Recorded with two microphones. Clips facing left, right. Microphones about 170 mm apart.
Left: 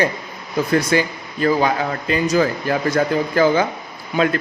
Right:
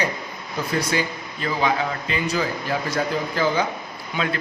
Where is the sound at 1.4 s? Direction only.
45° left (ahead or behind).